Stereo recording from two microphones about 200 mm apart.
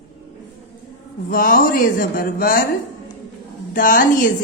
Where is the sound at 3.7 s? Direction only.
40° left (ahead or behind).